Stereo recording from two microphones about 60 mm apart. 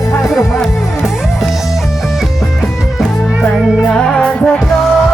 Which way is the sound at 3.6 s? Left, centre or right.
Centre.